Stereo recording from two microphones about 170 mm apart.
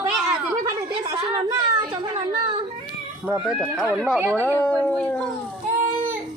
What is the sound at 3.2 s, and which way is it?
Speech, 5° right (ahead or behind).